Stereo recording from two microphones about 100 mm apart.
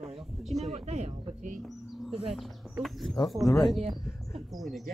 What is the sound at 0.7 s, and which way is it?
Speech, 90° right.